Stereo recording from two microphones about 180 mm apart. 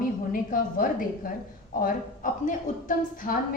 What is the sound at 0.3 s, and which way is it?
A woman's voice, 50° left (ahead or behind).